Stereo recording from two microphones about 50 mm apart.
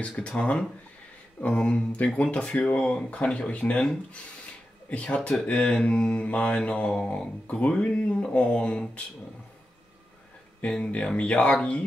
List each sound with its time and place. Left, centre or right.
0.0 s speech: left
4.8 s speech: left
6.5 s mantra: centre
7.4 s speech: left
10.6 s speech: left